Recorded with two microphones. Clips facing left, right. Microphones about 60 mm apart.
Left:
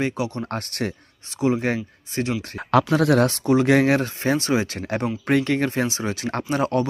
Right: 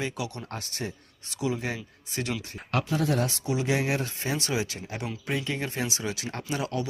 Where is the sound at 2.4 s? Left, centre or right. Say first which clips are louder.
Left 11 dB; left.